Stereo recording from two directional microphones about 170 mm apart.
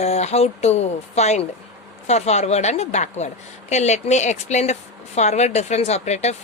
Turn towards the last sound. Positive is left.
turn(degrees=40)  # may be behind; listen again after turning